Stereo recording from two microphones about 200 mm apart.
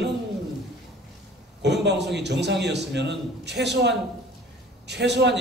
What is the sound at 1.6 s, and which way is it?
A man's voice, 60° right (ahead or behind).